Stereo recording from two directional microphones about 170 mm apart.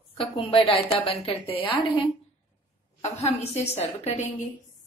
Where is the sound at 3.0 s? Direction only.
40° left (ahead or behind).